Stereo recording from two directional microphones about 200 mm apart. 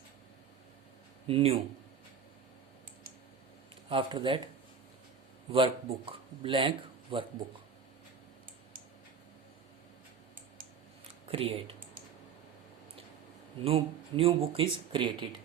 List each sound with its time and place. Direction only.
1.3 s speech: 30° right (ahead or behind)
3.8 s speech: 25° right (ahead or behind)
5.5 s speech: 25° right (ahead or behind)
11.3 s speech: 30° right (ahead or behind)
13.6 s speech: 30° right (ahead or behind)